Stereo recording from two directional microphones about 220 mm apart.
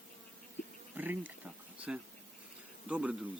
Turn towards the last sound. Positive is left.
turn(degrees=-5)  # may be behind; listen again after turning